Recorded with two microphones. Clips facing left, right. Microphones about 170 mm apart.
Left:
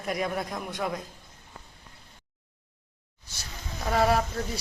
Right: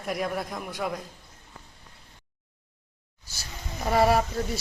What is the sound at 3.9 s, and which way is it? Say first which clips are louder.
Speech: right 2 dB; 5° right (ahead or behind).